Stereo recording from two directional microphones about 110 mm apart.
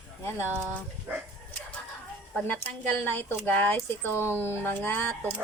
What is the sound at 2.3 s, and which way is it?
Speech, 15° left (ahead or behind).